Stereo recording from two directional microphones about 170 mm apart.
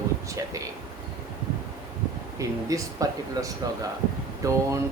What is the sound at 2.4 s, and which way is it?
Speech, 20° right (ahead or behind).